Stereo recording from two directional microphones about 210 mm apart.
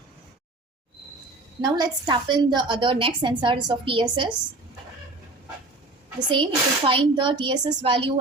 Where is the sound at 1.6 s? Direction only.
20° right (ahead or behind).